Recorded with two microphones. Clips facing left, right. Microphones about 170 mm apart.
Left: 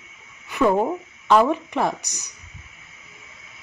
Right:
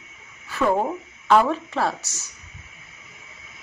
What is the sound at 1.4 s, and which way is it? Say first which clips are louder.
Speech: left 2 dB; 15° left (ahead or behind).